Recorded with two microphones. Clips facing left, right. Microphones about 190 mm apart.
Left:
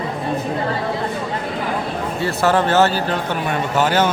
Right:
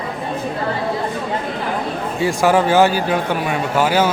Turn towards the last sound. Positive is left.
turn(degrees=-10)  # may be behind; listen again after turning